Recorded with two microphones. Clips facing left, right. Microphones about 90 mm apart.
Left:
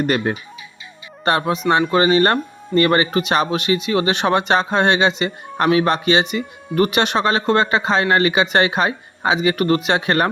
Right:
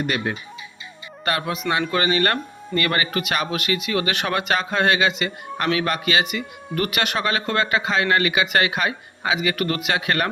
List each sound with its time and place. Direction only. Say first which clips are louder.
0.0 s fowl: left 5 dB; 40° left (ahead or behind)
1.2 s speech: left 6 dB; 30° left (ahead or behind)